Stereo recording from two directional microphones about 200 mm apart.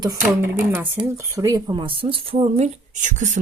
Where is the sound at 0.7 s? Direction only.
15° right (ahead or behind).